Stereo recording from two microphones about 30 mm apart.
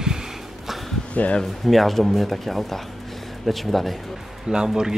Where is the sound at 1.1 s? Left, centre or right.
Left.